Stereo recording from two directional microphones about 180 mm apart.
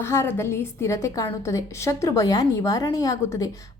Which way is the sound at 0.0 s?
15° left (ahead or behind).